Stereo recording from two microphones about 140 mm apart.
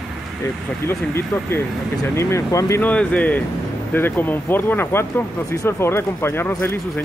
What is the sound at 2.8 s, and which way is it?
Speech, 10° left (ahead or behind).